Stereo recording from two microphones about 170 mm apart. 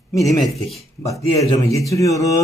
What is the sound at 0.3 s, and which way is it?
Speech, centre (ahead or behind).